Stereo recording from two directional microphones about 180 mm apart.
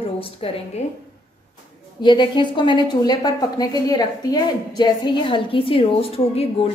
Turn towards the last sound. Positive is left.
turn(degrees=35)  # may be behind; listen again after turning